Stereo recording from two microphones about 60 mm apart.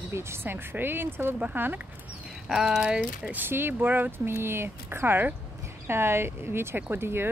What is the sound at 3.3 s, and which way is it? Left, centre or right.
Speech, right.